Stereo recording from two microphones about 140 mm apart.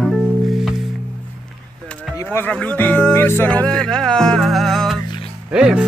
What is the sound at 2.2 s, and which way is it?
Speech, 10° left (ahead or behind).